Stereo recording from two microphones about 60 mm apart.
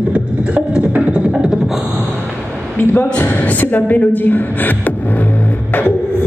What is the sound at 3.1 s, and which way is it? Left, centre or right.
Speech, left.